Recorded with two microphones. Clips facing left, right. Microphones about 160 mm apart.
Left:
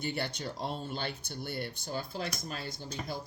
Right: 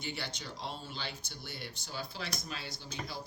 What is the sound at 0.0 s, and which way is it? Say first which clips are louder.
Speech: left 6 dB; 55° left (ahead or behind).